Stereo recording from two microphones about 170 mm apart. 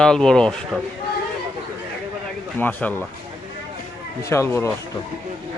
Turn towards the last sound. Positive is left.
turn(degrees=15)  # may be behind; listen again after turning